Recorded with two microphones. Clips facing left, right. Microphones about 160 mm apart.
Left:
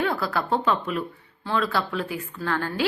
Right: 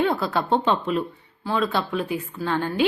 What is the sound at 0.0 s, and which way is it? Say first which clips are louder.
Speech: right 3 dB; 20° right (ahead or behind).